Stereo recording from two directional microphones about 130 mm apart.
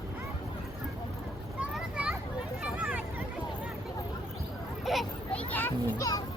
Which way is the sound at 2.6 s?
5° right (ahead or behind).